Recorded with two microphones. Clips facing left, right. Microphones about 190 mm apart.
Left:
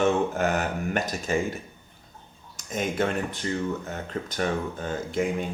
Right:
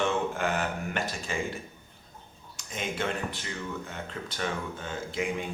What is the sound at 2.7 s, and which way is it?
Speech, 40° left (ahead or behind).